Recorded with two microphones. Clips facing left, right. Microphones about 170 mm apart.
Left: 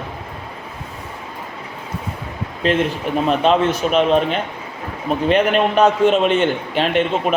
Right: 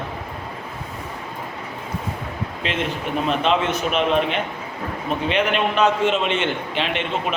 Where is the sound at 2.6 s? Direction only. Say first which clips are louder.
Left 8 dB; 40° left (ahead or behind).